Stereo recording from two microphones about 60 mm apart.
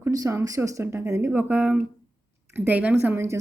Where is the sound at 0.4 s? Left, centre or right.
Right.